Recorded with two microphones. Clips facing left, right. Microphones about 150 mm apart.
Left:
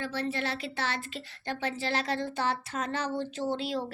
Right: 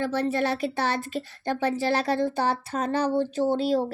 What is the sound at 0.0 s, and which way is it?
Speech, 50° right (ahead or behind).